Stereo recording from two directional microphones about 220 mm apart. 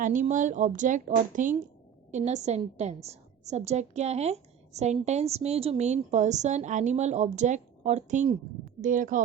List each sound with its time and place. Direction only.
0.0 s a woman's voice: 35° right (ahead or behind)